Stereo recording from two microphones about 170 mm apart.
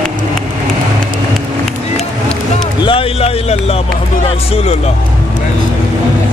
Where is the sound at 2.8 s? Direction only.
35° left (ahead or behind).